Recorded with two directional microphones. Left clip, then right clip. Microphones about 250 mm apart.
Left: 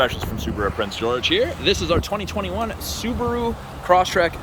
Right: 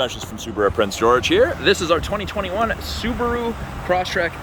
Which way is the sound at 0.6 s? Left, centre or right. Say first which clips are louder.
Right 6 dB; right.